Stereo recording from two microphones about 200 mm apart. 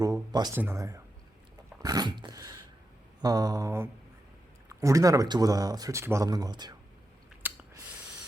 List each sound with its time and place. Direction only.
0.0 s speech: 20° right (ahead or behind)
1.8 s dog: 20° right (ahead or behind)
3.2 s mantra: 20° right (ahead or behind)
4.7 s speech: 15° right (ahead or behind)
7.4 s spray: 10° right (ahead or behind)